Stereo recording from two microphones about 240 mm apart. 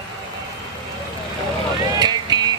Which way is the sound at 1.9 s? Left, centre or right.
Centre.